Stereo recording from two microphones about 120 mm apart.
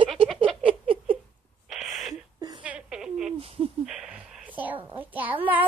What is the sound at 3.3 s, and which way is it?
Speech, 50° right (ahead or behind).